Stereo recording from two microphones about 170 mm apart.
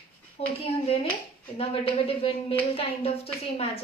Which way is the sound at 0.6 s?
35° left (ahead or behind).